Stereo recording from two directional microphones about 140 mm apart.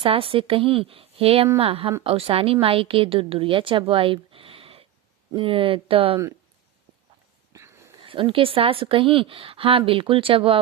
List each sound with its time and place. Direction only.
0.0 s a woman's voice: 40° right (ahead or behind)
7.5 s a sound: 20° right (ahead or behind)
8.0 s a woman's voice: 40° right (ahead or behind)